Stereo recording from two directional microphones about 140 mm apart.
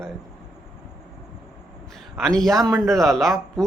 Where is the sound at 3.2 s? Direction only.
Centre (ahead or behind).